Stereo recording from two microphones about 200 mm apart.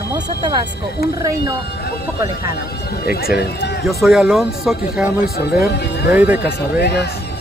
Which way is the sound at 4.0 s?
5° right (ahead or behind).